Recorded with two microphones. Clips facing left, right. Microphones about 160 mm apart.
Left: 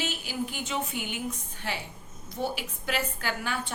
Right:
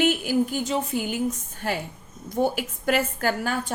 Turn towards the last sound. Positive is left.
turn(degrees=-45)  # may be behind; listen again after turning